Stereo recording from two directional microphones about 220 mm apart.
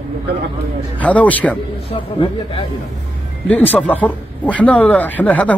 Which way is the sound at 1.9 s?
25° left (ahead or behind).